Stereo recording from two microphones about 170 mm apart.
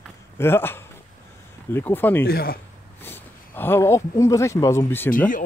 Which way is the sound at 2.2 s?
60° left (ahead or behind).